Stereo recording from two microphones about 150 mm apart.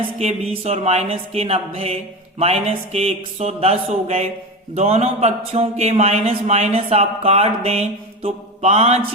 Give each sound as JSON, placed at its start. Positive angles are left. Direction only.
{"t": 0.2, "sound": "speech", "side_deg": -45}